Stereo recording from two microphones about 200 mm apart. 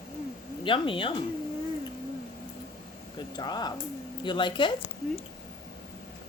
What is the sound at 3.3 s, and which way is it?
Speech, 20° left (ahead or behind).